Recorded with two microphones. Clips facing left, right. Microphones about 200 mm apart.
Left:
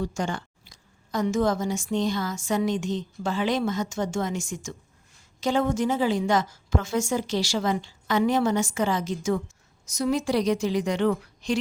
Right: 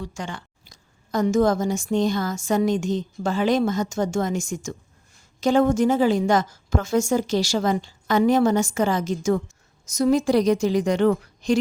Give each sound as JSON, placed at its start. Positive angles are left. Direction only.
{"t": 0.0, "sound": "speech", "side_deg": 45}
{"t": 0.6, "sound": "speech", "side_deg": -45}